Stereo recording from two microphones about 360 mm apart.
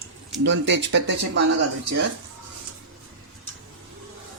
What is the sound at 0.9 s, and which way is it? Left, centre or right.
Speech, right.